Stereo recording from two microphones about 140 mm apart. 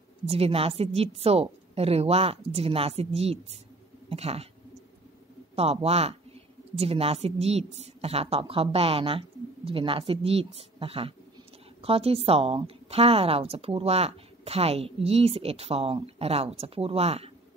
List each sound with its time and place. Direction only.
0.3 s a woman's voice: 45° right (ahead or behind)
5.6 s a woman's voice: 45° right (ahead or behind)